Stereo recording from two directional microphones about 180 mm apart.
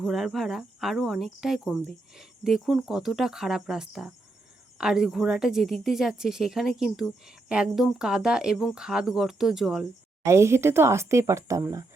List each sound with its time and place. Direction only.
0.0 s a woman's voice: centre (ahead or behind)
10.2 s speech: 15° right (ahead or behind)